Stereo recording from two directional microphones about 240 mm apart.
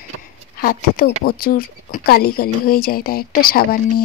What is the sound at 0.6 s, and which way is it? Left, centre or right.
Speech, left.